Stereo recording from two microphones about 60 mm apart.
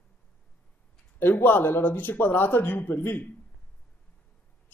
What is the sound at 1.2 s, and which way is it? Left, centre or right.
Speech, left.